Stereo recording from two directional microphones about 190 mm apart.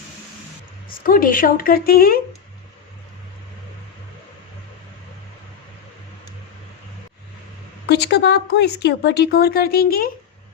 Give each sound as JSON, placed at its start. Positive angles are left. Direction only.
{"t": 1.0, "sound": "speech", "side_deg": 50}
{"t": 7.9, "sound": "speech", "side_deg": 60}